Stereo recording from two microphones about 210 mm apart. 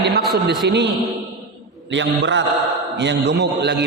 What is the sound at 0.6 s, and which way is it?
Speech, 55° right (ahead or behind).